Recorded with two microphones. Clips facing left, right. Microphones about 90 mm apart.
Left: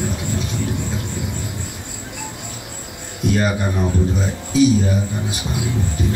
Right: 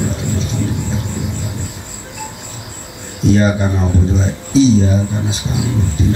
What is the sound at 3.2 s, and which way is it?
Speech, 25° right (ahead or behind).